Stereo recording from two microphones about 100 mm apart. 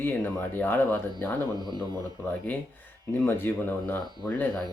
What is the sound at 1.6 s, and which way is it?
Speech, 45° right (ahead or behind).